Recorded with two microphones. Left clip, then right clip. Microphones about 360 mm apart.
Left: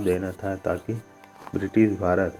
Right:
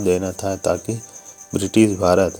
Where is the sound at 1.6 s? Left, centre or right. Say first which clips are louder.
Right 5 dB; right.